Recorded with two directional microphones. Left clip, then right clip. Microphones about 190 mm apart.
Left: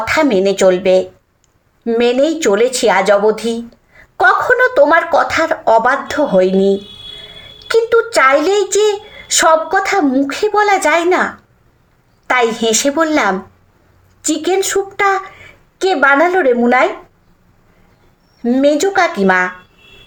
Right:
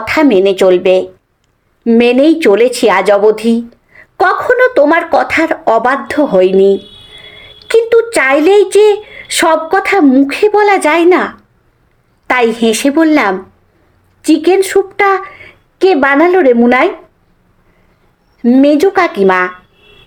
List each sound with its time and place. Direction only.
0.0 s speech: 35° right (ahead or behind)
12.3 s speech: 35° right (ahead or behind)
18.4 s speech: 40° right (ahead or behind)